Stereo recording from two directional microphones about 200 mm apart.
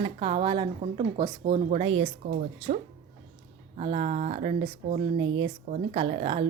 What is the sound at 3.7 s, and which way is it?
Speech, 30° right (ahead or behind).